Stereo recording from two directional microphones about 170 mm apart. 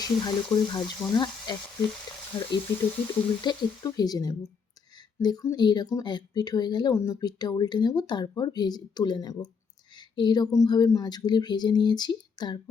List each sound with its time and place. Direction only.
0.0 s speech: 25° left (ahead or behind)